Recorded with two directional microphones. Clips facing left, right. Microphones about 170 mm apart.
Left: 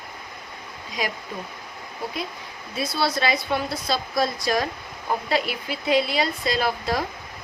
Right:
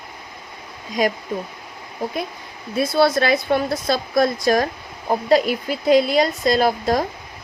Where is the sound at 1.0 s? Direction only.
50° right (ahead or behind).